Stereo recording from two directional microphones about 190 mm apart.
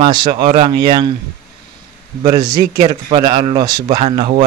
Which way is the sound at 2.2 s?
25° right (ahead or behind).